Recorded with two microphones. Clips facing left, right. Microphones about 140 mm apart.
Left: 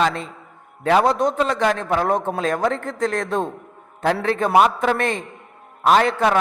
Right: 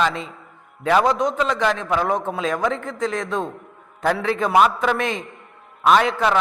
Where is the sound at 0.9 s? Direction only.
30° left (ahead or behind).